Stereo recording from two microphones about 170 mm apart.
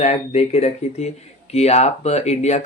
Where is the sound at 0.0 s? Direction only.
40° left (ahead or behind).